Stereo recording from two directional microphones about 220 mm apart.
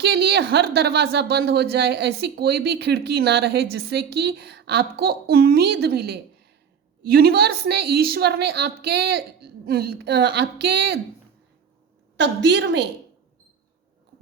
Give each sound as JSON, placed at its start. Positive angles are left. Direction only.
{"t": 0.0, "sound": "a woman's voice", "side_deg": -45}
{"t": 12.1, "sound": "a woman's voice", "side_deg": -50}